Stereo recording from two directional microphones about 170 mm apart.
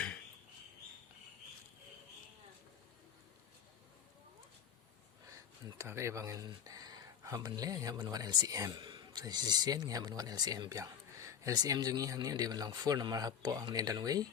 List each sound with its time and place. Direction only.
5.6 s speech: 15° right (ahead or behind)